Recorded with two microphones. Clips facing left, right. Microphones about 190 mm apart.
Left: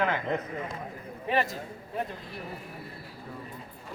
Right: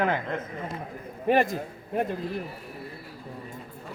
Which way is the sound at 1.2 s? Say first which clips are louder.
Right 6 dB; 50° right (ahead or behind).